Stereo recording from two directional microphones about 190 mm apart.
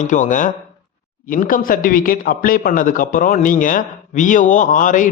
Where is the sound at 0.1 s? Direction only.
40° left (ahead or behind).